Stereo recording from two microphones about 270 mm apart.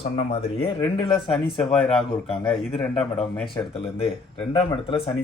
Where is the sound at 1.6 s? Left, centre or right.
Centre.